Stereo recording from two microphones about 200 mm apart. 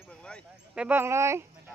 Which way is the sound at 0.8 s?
10° right (ahead or behind).